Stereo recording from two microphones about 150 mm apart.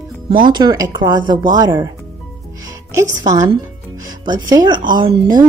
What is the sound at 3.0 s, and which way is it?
Speech, 20° right (ahead or behind).